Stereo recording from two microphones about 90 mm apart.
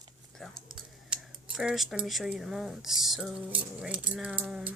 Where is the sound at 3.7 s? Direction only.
15° right (ahead or behind).